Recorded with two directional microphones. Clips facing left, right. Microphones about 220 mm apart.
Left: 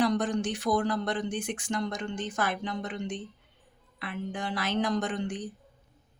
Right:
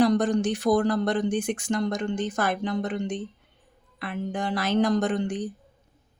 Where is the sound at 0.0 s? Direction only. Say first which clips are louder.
Right 6 dB; 40° right (ahead or behind).